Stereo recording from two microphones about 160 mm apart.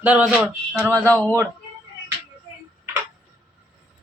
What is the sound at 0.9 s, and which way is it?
Speech, 10° left (ahead or behind).